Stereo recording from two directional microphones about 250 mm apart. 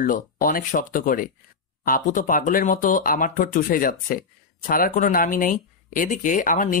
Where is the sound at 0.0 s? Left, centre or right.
Left.